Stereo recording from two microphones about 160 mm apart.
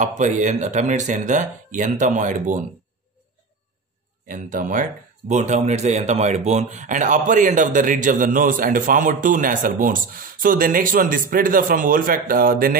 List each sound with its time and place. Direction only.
0.0 s speech: 50° right (ahead or behind)
4.3 s speech: 55° right (ahead or behind)
5.3 s speech: 45° right (ahead or behind); by 12.7 s 65° right (ahead or behind)